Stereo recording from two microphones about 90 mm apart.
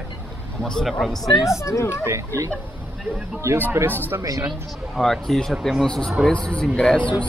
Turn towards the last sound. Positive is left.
turn(degrees=10)  # may be behind; listen again after turning